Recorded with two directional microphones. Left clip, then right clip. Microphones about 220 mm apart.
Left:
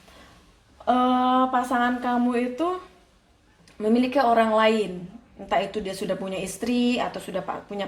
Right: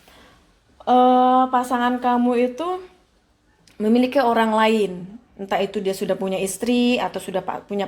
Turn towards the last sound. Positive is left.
turn(degrees=-45)  # may be behind; listen again after turning